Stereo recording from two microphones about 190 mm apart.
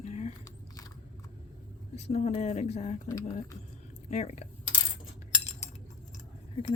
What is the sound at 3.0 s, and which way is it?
Speech, 15° left (ahead or behind).